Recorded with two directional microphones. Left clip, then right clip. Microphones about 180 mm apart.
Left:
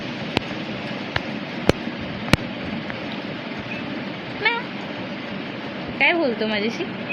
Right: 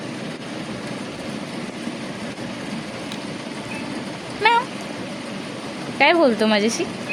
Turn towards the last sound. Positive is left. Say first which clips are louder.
# right 4 dB
turn(degrees=-75)  # may be behind; listen again after turning